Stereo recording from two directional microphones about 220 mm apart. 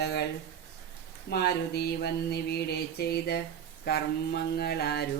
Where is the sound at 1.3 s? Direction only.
45° left (ahead or behind).